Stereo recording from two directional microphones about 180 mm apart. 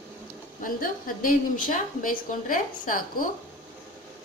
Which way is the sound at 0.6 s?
50° left (ahead or behind).